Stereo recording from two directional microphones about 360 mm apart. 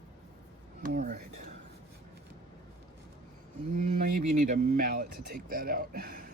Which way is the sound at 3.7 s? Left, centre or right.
Right.